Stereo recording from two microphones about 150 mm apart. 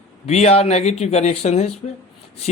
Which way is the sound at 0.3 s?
45° left (ahead or behind).